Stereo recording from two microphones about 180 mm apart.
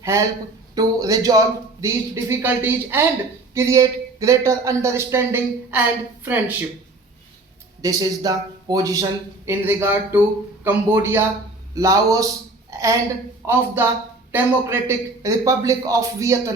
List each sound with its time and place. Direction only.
0.0 s speech: 15° right (ahead or behind)
7.8 s a woman's voice: 20° right (ahead or behind)